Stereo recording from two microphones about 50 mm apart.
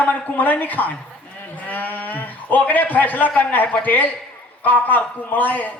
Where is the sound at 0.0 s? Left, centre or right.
Left.